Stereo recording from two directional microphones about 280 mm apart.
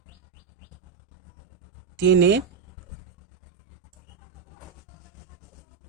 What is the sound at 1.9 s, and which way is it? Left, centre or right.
Speech, right.